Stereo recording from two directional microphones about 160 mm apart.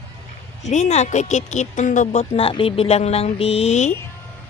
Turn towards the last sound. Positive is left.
turn(degrees=45)  # may be behind; listen again after turning